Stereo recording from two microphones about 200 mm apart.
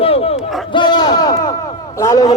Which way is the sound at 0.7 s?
20° left (ahead or behind).